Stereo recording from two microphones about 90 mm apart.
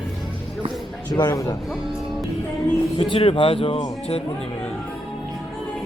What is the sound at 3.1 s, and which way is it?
Speech, 80° left.